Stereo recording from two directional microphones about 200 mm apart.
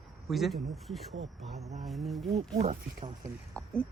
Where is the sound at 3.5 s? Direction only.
5° left (ahead or behind).